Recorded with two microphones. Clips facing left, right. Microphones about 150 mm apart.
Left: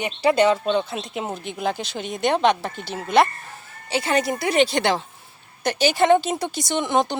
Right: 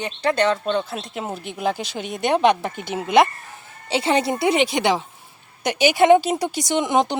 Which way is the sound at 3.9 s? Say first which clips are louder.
Right 2 dB; 25° right (ahead or behind).